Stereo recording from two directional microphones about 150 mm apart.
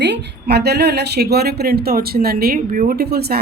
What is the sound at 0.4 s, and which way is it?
A woman's voice, 90° right.